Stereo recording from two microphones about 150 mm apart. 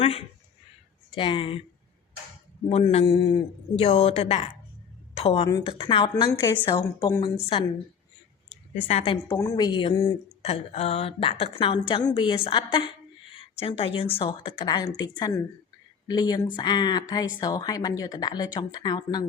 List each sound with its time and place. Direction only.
0.0 s speech: 40° left (ahead or behind)
2.6 s a woman's voice: 45° left (ahead or behind)
6.4 s speech: 20° left (ahead or behind)
8.9 s speech: 45° left (ahead or behind)
9.3 s speech: 25° left (ahead or behind)